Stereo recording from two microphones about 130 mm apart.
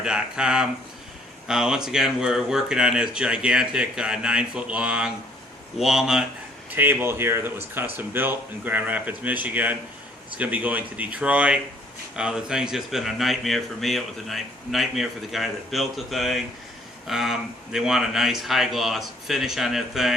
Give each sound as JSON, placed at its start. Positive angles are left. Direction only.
{"t": 0.0, "sound": "speech", "side_deg": -5}
{"t": 6.7, "sound": "speech", "side_deg": -15}